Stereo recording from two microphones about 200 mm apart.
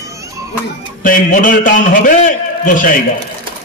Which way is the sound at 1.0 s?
45° left (ahead or behind).